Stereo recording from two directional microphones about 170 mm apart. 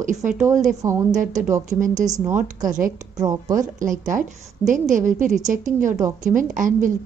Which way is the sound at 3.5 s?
50° right (ahead or behind).